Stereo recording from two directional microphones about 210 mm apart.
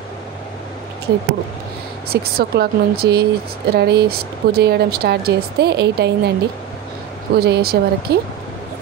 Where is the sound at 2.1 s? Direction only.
45° right (ahead or behind).